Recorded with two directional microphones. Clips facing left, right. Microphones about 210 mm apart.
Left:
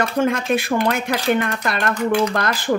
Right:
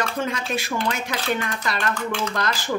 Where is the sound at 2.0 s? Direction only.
15° left (ahead or behind).